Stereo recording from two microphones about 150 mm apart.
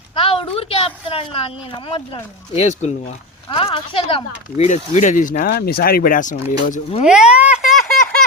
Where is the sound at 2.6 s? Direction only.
50° left (ahead or behind).